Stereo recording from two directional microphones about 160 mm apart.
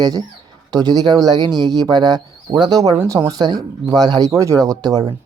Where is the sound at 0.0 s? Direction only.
25° right (ahead or behind).